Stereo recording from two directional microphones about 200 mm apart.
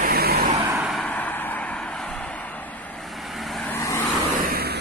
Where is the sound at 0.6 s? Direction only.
10° right (ahead or behind).